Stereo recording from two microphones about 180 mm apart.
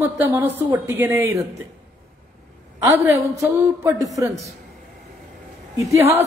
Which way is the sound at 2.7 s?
15° right (ahead or behind).